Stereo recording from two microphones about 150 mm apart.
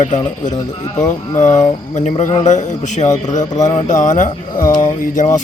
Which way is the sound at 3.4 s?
25° left (ahead or behind).